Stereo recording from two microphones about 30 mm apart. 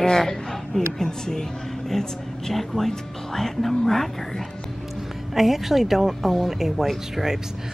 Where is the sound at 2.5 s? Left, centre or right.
Centre.